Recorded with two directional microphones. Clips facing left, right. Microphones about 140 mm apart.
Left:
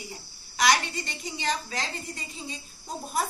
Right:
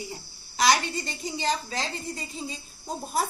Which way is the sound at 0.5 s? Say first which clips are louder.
Right 1 dB; 30° right (ahead or behind).